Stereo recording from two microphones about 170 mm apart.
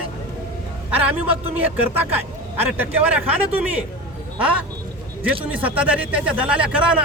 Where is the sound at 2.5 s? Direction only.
10° right (ahead or behind).